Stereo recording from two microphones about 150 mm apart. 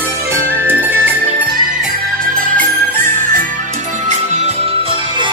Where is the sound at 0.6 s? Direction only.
15° right (ahead or behind).